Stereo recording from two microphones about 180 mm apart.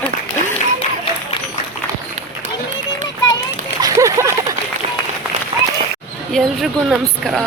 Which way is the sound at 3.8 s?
15° right (ahead or behind).